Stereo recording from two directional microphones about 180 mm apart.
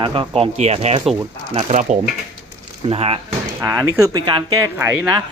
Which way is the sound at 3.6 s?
15° right (ahead or behind).